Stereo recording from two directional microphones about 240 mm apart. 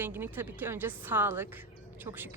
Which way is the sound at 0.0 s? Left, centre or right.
Centre.